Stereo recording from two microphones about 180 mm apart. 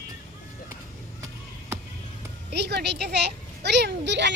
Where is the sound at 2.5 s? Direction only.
70° right (ahead or behind).